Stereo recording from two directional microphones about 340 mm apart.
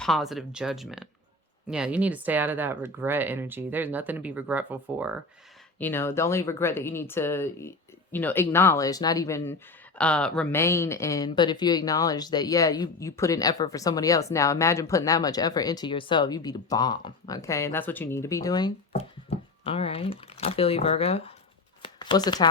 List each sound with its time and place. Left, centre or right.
0.0 s speech: centre
5.8 s speech: centre
21.8 s shuffling cards: centre